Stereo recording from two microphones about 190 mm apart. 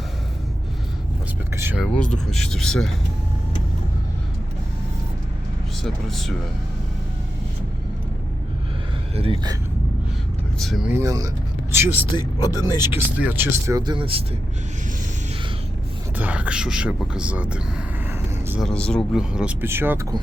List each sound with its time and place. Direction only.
1.5 s vehicle: 10° right (ahead or behind)
1.8 s speech: 5° left (ahead or behind)
5.8 s speech: centre (ahead or behind)
9.1 s speech: 30° right (ahead or behind)
10.6 s speech: centre (ahead or behind)
10.9 s a man's voice: 20° right (ahead or behind)
12.1 s speech: 20° left (ahead or behind)
13.1 s speech: 10° right (ahead or behind); by 14.3 s 30° right (ahead or behind)
16.1 s speech: 10° right (ahead or behind)
18.6 s speech: 5° left (ahead or behind); by 20.1 s 10° right (ahead or behind)